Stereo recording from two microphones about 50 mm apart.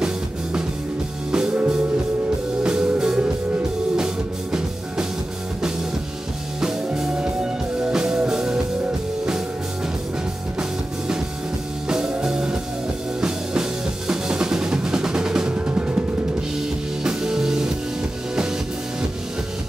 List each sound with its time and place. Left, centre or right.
1.3 s music: centre
2.6 s music: centre
6.6 s music: centre
10.6 s music: centre
13.2 s drum: centre
15.5 s music: right
17.0 s music: centre